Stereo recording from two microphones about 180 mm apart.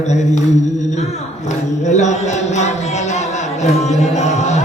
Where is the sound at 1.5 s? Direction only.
40° left (ahead or behind).